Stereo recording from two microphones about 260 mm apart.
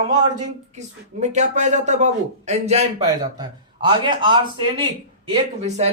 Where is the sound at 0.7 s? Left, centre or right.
Right.